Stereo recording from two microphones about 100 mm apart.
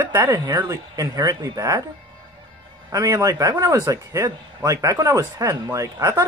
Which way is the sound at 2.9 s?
35° right (ahead or behind).